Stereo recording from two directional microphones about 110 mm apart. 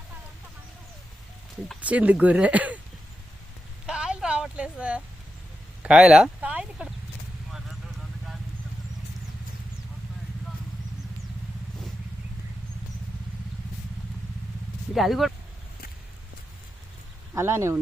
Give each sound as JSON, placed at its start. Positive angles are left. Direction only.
{"t": 1.8, "sound": "speech", "side_deg": -15}
{"t": 3.8, "sound": "a sound", "side_deg": -10}
{"t": 7.5, "sound": "clip-clop", "side_deg": -5}
{"t": 14.9, "sound": "speech", "side_deg": 0}
{"t": 17.3, "sound": "speech", "side_deg": -25}